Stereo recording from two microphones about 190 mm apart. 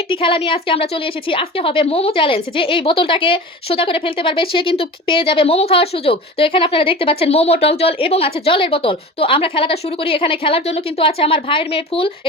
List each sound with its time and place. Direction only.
0.1 s a woman's voice: 30° left (ahead or behind)